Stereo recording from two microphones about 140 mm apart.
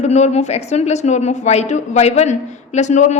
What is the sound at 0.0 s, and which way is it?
A woman's voice, 55° left (ahead or behind).